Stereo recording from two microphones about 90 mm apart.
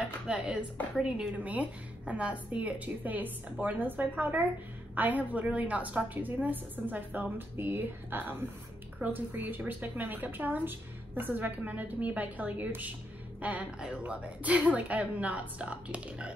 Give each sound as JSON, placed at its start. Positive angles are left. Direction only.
{"t": 0.3, "sound": "a woman's voice", "side_deg": -10}